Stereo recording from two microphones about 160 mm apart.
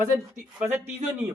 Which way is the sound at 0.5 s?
15° right (ahead or behind).